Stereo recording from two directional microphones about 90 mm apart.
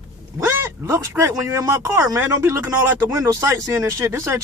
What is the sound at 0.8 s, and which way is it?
Speech, 35° right (ahead or behind).